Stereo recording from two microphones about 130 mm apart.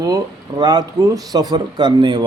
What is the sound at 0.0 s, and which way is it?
A man's voice, 30° right (ahead or behind).